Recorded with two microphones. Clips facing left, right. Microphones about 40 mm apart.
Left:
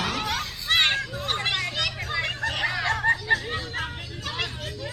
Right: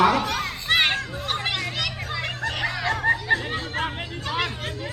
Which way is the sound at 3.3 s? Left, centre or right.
Centre.